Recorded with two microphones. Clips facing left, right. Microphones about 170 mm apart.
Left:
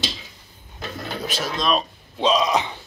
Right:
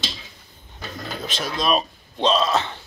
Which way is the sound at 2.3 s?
15° left (ahead or behind).